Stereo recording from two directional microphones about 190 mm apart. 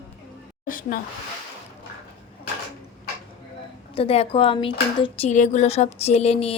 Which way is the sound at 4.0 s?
30° left (ahead or behind).